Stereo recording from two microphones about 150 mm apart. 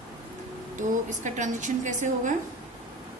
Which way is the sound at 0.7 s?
55° right (ahead or behind).